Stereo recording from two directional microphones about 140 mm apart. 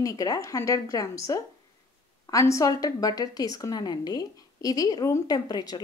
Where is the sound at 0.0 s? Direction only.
25° left (ahead or behind).